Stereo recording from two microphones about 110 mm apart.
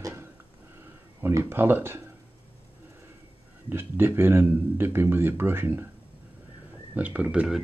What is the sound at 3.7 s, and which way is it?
Speech, 20° right (ahead or behind).